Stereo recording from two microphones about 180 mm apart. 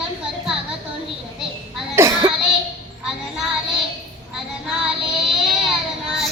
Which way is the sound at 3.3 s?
Centre (ahead or behind).